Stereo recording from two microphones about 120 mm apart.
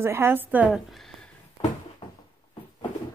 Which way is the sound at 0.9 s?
Centre (ahead or behind).